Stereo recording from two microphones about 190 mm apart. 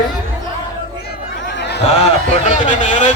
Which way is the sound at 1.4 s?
65° left (ahead or behind).